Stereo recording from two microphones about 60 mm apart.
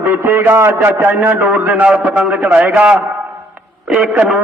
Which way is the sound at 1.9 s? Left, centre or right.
Centre.